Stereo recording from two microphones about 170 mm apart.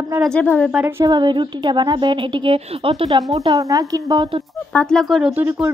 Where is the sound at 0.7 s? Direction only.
10° right (ahead or behind).